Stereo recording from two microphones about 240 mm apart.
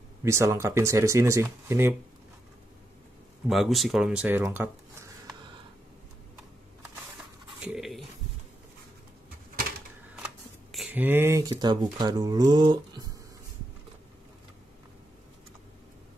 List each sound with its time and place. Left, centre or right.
0.2 s speech: centre
3.4 s speech: centre
7.6 s a sound: centre
10.1 s speech: centre